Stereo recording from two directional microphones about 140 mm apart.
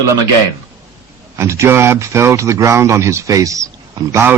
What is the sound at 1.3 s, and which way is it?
A man's voice, 20° right (ahead or behind).